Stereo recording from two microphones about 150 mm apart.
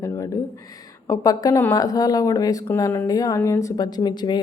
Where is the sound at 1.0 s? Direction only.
20° left (ahead or behind).